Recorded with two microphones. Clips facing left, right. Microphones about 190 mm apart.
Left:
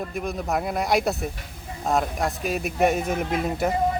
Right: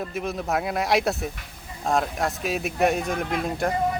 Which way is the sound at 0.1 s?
Centre (ahead or behind).